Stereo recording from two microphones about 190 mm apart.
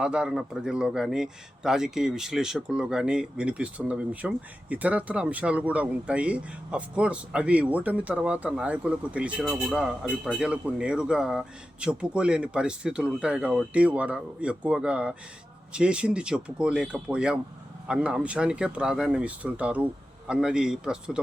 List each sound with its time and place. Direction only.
0.0 s speech: 5° right (ahead or behind)